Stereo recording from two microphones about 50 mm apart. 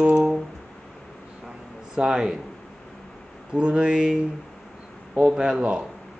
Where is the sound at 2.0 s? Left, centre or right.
Centre.